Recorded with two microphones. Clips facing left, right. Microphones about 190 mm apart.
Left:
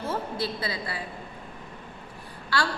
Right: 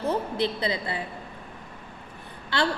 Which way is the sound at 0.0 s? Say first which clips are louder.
Right 4 dB; 20° right (ahead or behind).